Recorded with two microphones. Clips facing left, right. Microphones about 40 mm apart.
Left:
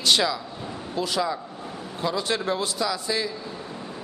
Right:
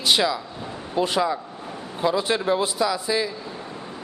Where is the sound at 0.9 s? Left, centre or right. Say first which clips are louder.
Right 4 dB; right.